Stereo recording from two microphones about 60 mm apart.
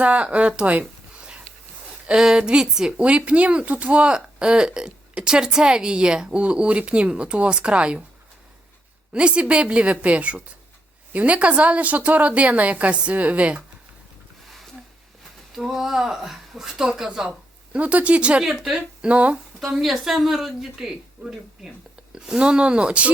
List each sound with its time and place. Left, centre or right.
0.0 s a woman's voice: right
9.1 s a woman's voice: centre
15.5 s a woman's voice: centre
19.0 s a woman's voice: right
19.5 s a woman's voice: centre